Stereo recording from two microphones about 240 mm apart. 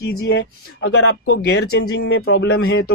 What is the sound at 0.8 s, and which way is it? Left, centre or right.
Speech, left.